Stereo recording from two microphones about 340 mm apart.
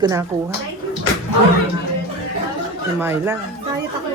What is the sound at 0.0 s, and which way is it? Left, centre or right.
Speech, centre.